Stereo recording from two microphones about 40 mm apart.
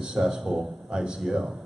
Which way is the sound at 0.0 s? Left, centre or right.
Centre.